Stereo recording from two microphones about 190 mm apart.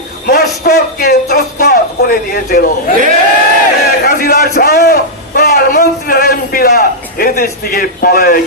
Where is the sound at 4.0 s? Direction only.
50° left (ahead or behind).